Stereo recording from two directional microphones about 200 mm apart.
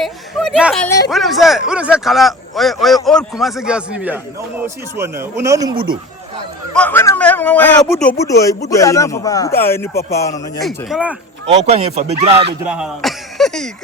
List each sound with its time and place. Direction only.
0.0 s a sound: centre (ahead or behind)
0.9 s speech: 15° left (ahead or behind)
1.1 s speech: centre (ahead or behind); by 5.8 s 20° right (ahead or behind)
6.7 s a man's voice: 10° left (ahead or behind)
8.2 s speech: 15° left (ahead or behind)
10.8 s speech: 5° right (ahead or behind)
11.6 s speech: 30° right (ahead or behind)
12.6 s speech: 5° right (ahead or behind)